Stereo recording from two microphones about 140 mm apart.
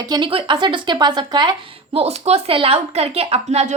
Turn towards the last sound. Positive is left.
turn(degrees=-50)  # may be behind; listen again after turning